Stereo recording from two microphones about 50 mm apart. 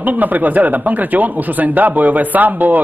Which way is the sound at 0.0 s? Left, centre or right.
Right.